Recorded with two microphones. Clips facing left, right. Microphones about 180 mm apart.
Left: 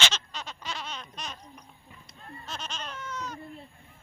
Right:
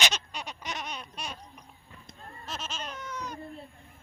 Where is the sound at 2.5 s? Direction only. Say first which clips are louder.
Right 1 dB; 5° right (ahead or behind).